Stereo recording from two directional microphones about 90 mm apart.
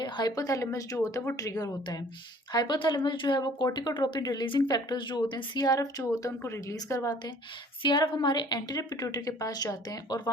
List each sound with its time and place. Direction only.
0.0 s a woman's voice: 50° left (ahead or behind)
2.5 s a woman's voice: 55° left (ahead or behind); by 7.1 s 35° left (ahead or behind)
7.8 s a woman's voice: 55° left (ahead or behind); by 10.2 s 40° left (ahead or behind)